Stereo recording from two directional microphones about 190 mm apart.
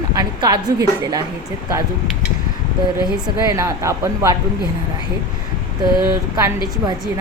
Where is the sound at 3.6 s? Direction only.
15° right (ahead or behind).